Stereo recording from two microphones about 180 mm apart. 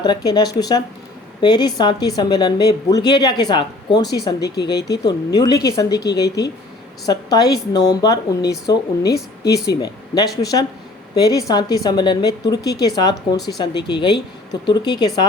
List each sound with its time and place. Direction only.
0.0 s a woman's voice: 20° left (ahead or behind)
4.4 s speech: 65° left (ahead or behind)
5.0 s a woman's voice: 20° left (ahead or behind)
7.1 s a woman's voice: 20° left (ahead or behind)
9.0 s a woman's voice: 60° left (ahead or behind)
9.8 s a woman's voice: 20° left (ahead or behind)